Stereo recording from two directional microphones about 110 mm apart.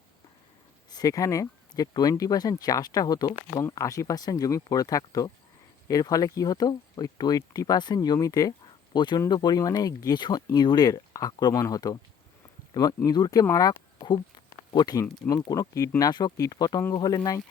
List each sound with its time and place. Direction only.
0.9 s speech: 35° left (ahead or behind)
13.4 s a sound: 30° left (ahead or behind)
15.4 s speech: 35° left (ahead or behind)